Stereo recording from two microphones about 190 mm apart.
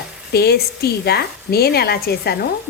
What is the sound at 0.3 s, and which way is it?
A woman's voice, 55° left (ahead or behind).